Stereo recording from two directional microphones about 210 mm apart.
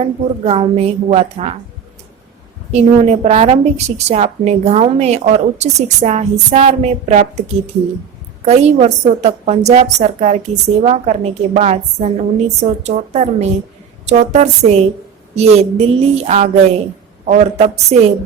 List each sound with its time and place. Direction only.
0.0 s a woman's voice: 30° right (ahead or behind)
2.7 s a woman's voice: 30° right (ahead or behind)
8.4 s a woman's voice: 30° right (ahead or behind)